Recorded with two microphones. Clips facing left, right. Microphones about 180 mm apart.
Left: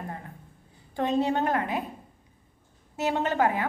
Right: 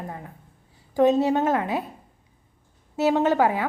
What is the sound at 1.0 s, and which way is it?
Speech, 20° right (ahead or behind).